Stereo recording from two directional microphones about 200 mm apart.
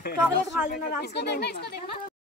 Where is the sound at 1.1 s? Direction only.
55° left (ahead or behind).